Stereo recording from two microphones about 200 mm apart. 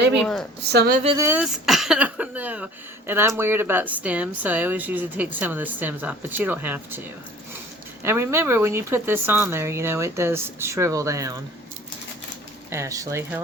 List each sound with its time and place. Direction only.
0.7 s speech: 55° right (ahead or behind)
1.0 s speech: 15° right (ahead or behind)
8.0 s speech: 10° right (ahead or behind)
12.7 s speech: 15° right (ahead or behind)